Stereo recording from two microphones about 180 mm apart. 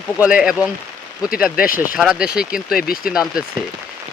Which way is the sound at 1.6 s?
50° left (ahead or behind).